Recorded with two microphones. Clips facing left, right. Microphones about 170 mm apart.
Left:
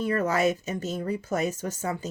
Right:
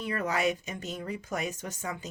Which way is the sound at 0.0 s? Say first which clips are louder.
Left 5 dB; 40° left (ahead or behind).